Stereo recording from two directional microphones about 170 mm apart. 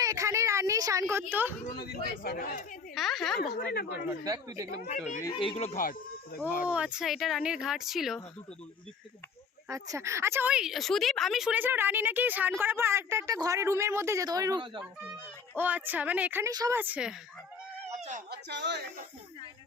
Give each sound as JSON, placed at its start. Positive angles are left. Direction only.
{"t": 0.0, "sound": "a sound", "side_deg": -20}
{"t": 1.3, "sound": "a woman's voice", "side_deg": -10}
{"t": 2.2, "sound": "speech", "side_deg": 60}
{"t": 2.9, "sound": "speech", "side_deg": 0}
{"t": 3.5, "sound": "speech", "side_deg": 65}
{"t": 4.2, "sound": "speech", "side_deg": -20}
{"t": 4.9, "sound": "speech", "side_deg": 45}
{"t": 5.3, "sound": "speech", "side_deg": 30}
{"t": 6.7, "sound": "speech", "side_deg": -5}
{"t": 9.9, "sound": "a woman's voice", "side_deg": -15}
{"t": 15.5, "sound": "a woman's voice", "side_deg": -10}
{"t": 16.5, "sound": "speech", "side_deg": -25}
{"t": 16.7, "sound": "a woman's voice", "side_deg": -10}
{"t": 18.3, "sound": "speech", "side_deg": -90}